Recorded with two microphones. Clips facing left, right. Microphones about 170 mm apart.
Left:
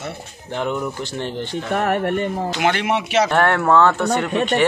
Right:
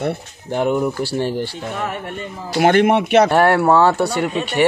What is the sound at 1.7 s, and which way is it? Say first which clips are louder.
Speech: left 6 dB; 65° left (ahead or behind).